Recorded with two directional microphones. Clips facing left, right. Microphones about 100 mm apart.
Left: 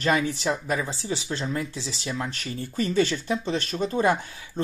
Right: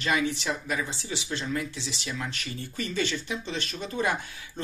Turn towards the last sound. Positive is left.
turn(degrees=35)  # may be behind; listen again after turning